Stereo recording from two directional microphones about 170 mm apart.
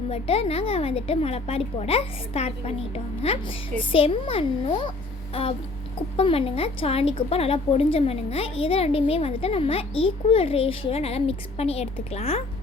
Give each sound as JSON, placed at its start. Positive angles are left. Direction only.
{"t": 0.1, "sound": "a woman's voice", "side_deg": 35}